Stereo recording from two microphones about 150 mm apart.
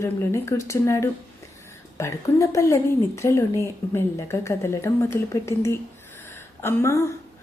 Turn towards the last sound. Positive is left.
turn(degrees=20)  # may be behind; listen again after turning